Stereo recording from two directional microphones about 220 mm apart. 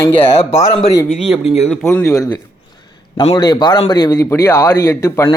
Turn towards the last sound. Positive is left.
turn(degrees=15)  # may be behind; listen again after turning